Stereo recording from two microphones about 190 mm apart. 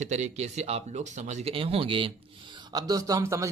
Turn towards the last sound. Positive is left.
turn(degrees=-15)  # may be behind; listen again after turning